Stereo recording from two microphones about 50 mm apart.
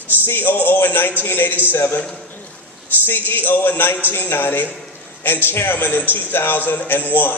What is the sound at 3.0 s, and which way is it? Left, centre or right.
A man's voice, left.